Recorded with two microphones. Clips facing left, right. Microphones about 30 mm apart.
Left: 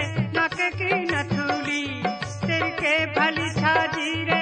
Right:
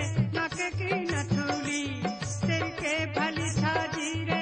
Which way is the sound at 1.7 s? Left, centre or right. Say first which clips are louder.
Left 5 dB; left.